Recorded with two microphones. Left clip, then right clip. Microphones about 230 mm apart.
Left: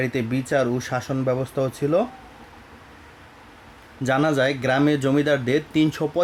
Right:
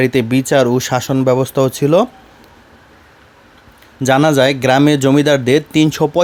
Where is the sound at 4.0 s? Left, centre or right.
Right.